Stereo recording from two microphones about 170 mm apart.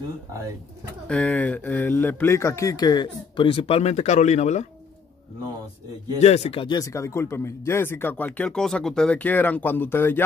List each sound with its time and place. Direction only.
1.0 s speech: 5° left (ahead or behind); by 4.6 s 40° left (ahead or behind)
6.1 s speech: 40° left (ahead or behind)
6.8 s speech: 15° left (ahead or behind)